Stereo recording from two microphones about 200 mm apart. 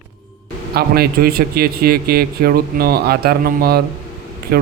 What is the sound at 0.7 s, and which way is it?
Speech, 50° right (ahead or behind).